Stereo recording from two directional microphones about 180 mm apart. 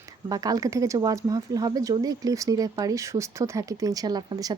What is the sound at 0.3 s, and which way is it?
Speech, 20° right (ahead or behind).